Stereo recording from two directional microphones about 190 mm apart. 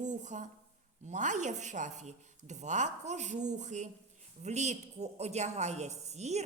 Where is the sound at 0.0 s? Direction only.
40° right (ahead or behind).